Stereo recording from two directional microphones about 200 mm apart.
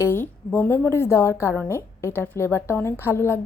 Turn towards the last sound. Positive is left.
turn(degrees=10)  # may be behind; listen again after turning